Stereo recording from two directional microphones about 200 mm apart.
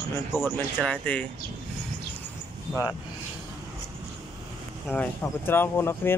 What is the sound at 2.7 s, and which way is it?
Speech, 10° left (ahead or behind).